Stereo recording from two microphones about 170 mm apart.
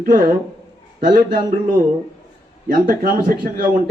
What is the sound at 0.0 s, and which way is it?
Speech, 55° right (ahead or behind).